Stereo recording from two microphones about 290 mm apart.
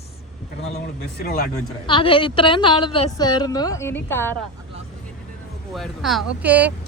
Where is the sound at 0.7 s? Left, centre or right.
Left.